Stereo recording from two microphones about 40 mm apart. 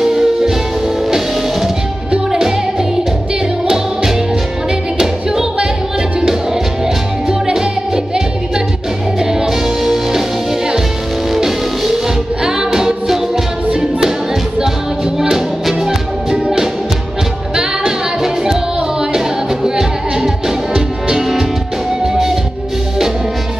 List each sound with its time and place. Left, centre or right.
0.0 s music: centre
2.3 s music: centre
7.2 s music: centre
11.3 s music: centre
15.1 s music: centre